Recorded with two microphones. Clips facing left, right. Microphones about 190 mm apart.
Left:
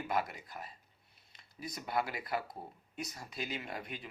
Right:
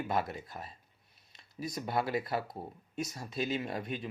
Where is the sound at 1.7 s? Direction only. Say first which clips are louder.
Right 4 dB; 20° right (ahead or behind).